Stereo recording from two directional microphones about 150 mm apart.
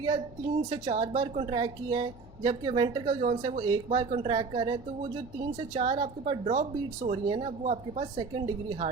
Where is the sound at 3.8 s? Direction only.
45° right (ahead or behind).